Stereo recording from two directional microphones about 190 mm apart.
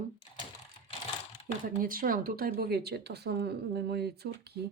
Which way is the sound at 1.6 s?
50° right (ahead or behind).